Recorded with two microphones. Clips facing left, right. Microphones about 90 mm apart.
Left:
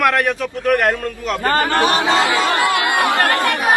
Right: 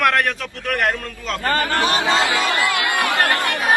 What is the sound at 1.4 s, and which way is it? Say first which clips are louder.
Speech: left 4 dB; 65° left (ahead or behind).